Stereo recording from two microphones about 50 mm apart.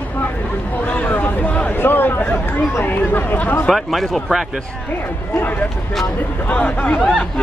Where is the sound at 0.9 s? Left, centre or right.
Left.